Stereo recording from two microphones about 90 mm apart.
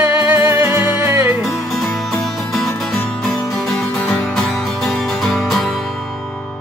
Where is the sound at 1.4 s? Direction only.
Centre (ahead or behind).